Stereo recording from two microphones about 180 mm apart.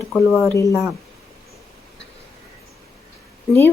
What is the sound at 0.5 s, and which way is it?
Speech, 15° left (ahead or behind).